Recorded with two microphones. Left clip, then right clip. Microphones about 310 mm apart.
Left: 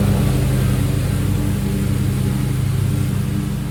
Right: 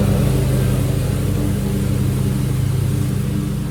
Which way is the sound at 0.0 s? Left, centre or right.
Centre.